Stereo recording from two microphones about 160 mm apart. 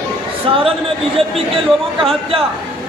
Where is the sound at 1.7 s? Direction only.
5° left (ahead or behind).